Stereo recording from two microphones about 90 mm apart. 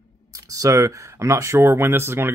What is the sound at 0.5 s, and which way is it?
Speech, 35° right (ahead or behind).